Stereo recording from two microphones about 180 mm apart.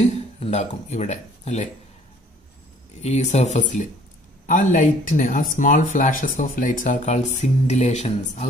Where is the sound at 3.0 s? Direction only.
40° left (ahead or behind).